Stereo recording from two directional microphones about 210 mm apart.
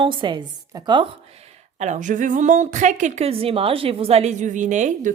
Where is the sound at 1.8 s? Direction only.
35° right (ahead or behind).